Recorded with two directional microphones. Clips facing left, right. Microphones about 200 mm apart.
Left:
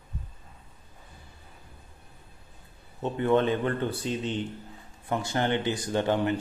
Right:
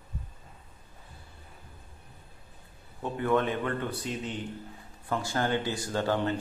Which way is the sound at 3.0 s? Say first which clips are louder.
Left 3 dB; 25° left (ahead or behind).